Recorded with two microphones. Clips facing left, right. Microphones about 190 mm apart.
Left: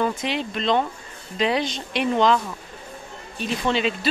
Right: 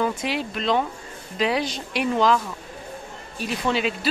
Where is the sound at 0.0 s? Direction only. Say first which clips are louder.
Even; 5° right (ahead or behind).